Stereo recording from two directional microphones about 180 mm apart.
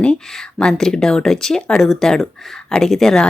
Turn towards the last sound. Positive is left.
turn(degrees=5)  # may be behind; listen again after turning